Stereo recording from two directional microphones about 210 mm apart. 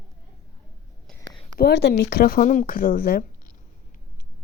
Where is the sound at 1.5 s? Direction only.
50° left (ahead or behind).